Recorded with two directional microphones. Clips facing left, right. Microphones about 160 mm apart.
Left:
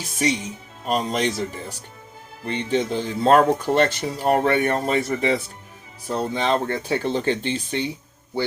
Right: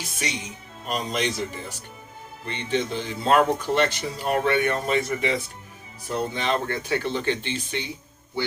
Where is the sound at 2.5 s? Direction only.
40° left (ahead or behind).